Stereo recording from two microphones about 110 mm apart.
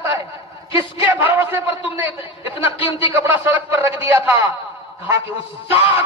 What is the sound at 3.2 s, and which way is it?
A man's voice, 15° right (ahead or behind).